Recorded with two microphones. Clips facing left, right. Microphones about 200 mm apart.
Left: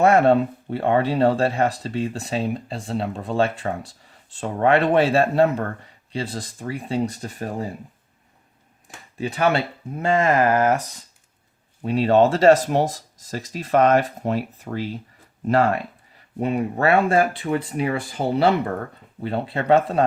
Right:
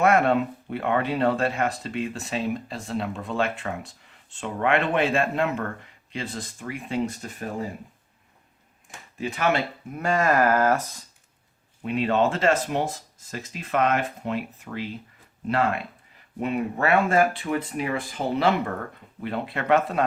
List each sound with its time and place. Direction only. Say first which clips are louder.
0.0 s speech: left 4 dB; 30° left (ahead or behind)
9.1 s speech: left 3 dB; 35° left (ahead or behind)
11.8 s speech: left 6 dB; 35° left (ahead or behind)